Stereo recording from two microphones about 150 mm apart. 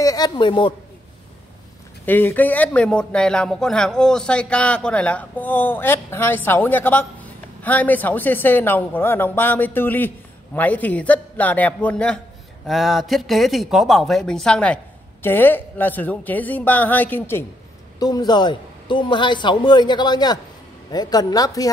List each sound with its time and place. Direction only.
0.0 s a man's voice: 25° left (ahead or behind)
2.0 s speech: 10° left (ahead or behind)
17.9 s a man's voice: 25° left (ahead or behind)